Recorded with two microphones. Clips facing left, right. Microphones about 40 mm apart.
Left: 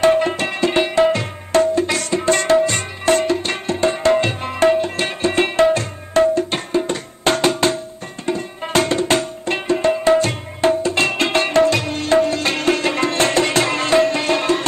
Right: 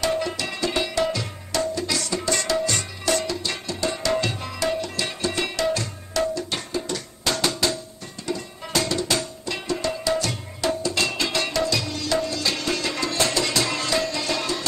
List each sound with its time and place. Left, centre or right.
0.0 s music: left